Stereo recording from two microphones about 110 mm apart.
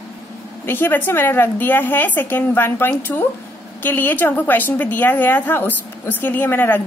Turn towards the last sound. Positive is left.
turn(degrees=20)  # may be behind; listen again after turning